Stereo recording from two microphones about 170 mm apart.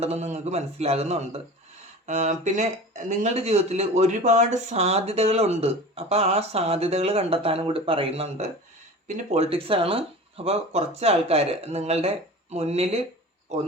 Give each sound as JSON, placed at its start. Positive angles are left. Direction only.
{"t": 0.0, "sound": "speech", "side_deg": -40}